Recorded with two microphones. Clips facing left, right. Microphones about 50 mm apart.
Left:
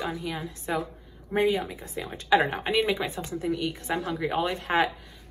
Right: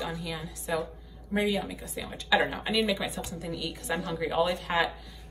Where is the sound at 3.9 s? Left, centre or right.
Centre; by 4.9 s left.